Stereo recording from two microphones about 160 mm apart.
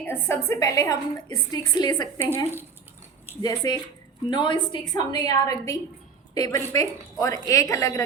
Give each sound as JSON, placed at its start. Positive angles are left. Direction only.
{"t": 0.0, "sound": "a woman's voice", "side_deg": 15}
{"t": 2.1, "sound": "a woman's voice", "side_deg": 15}